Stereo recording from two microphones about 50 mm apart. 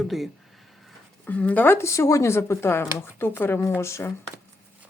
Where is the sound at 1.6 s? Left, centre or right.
Left.